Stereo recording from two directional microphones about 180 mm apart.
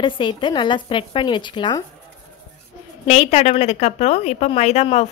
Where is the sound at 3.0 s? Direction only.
40° left (ahead or behind).